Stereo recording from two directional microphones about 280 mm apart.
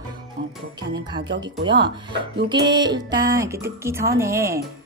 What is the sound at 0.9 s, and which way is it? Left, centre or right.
Speech, centre.